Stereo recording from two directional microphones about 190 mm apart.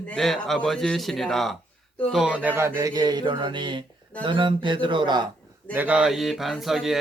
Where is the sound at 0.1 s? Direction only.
5° left (ahead or behind).